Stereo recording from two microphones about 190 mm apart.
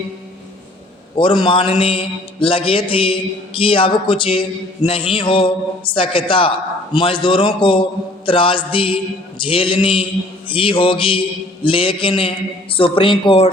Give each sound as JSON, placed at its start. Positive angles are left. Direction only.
{"t": 1.1, "sound": "a man's voice", "side_deg": 25}